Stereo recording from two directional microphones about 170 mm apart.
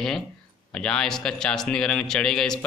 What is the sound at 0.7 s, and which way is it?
A man's voice, 5° left (ahead or behind).